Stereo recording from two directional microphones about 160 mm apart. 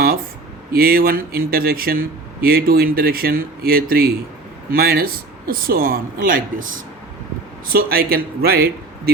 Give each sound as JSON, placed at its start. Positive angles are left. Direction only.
{"t": 0.7, "sound": "speech", "side_deg": -70}
{"t": 7.7, "sound": "speech", "side_deg": -70}